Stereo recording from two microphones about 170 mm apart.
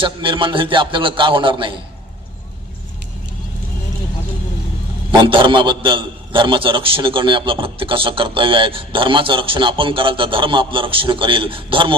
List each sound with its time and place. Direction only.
0.0 s a man's voice: 30° right (ahead or behind)
5.1 s a man's voice: 30° right (ahead or behind)